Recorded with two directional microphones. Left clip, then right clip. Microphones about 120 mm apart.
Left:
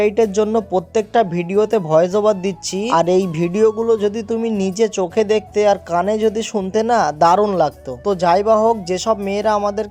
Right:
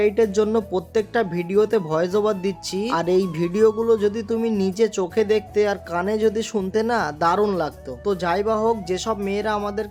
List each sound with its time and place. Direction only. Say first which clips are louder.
0.0 s speech: left 3 dB; 25° left (ahead or behind)